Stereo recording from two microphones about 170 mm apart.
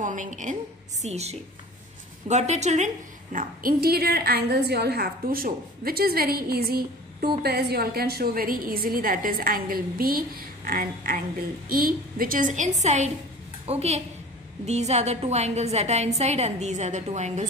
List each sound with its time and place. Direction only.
0.0 s a woman's voice: 50° right (ahead or behind)
3.3 s a woman's voice: 60° right (ahead or behind); by 17.5 s 45° right (ahead or behind)